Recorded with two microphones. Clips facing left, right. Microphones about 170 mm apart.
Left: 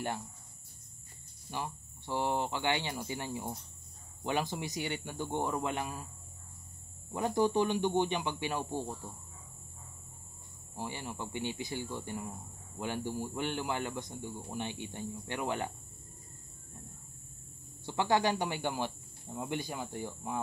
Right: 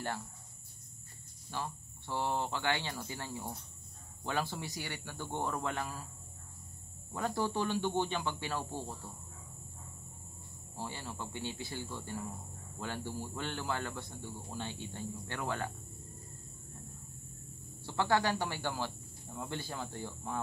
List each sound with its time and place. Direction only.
1.5 s speech: 15° left (ahead or behind)
7.1 s speech: 20° left (ahead or behind)
10.8 s speech: 15° left (ahead or behind)
17.8 s speech: 15° left (ahead or behind)